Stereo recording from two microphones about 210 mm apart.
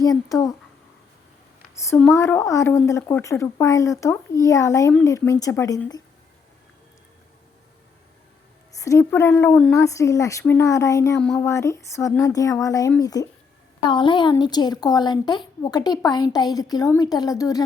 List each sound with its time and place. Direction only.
0.0 s a woman's voice: 15° left (ahead or behind)
1.7 s a woman's voice: 15° left (ahead or behind)
8.8 s a woman's voice: 15° left (ahead or behind)